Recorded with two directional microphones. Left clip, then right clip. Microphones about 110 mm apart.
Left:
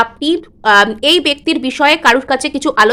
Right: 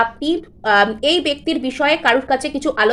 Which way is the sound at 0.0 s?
50° left (ahead or behind).